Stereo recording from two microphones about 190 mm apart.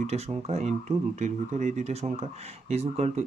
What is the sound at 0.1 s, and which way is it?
Speech, 35° right (ahead or behind).